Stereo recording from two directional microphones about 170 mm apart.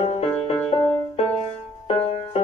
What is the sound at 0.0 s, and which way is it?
Music, 40° left (ahead or behind).